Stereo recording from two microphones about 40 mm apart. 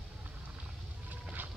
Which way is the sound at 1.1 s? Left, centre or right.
Right.